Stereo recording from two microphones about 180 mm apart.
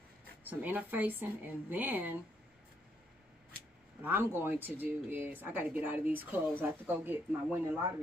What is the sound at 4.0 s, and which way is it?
Speech, 10° right (ahead or behind).